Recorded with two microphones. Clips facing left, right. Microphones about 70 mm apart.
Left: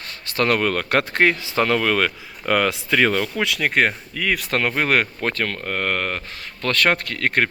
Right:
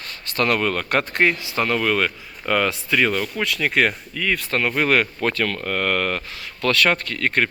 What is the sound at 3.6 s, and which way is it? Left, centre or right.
Speech, left.